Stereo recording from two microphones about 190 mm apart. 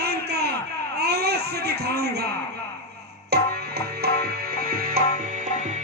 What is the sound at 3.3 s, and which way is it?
Music, 55° right (ahead or behind).